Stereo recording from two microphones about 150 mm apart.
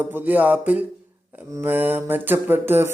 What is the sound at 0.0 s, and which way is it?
Mantra, 10° right (ahead or behind).